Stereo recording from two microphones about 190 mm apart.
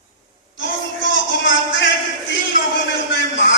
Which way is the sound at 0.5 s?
75° left (ahead or behind).